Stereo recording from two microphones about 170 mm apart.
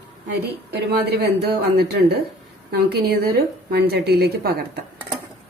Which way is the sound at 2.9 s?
65° right (ahead or behind).